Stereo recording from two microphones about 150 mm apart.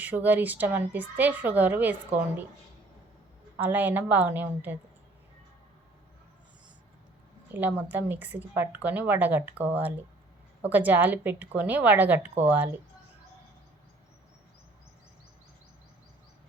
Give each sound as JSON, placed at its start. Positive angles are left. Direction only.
{"t": 0.0, "sound": "a woman's voice", "side_deg": -10}
{"t": 3.6, "sound": "a woman's voice", "side_deg": -10}
{"t": 7.5, "sound": "a woman's voice", "side_deg": -10}